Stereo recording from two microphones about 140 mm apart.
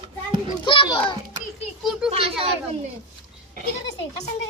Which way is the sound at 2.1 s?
40° right (ahead or behind).